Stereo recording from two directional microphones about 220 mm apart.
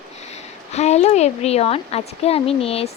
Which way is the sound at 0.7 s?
30° left (ahead or behind).